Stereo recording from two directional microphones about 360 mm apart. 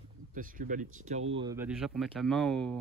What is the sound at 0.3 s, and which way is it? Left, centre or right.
Speech, right.